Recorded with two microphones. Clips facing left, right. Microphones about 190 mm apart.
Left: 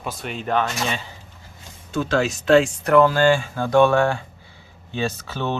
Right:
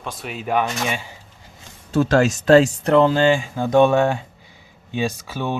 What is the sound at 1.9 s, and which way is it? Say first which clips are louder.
Speech: right 5 dB; 40° right (ahead or behind).